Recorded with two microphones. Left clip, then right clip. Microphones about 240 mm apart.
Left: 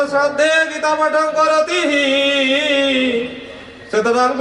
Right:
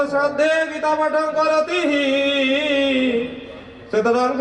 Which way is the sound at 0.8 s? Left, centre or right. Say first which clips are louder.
Left 3 dB; centre.